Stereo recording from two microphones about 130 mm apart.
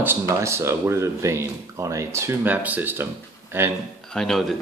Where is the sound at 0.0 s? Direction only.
20° right (ahead or behind).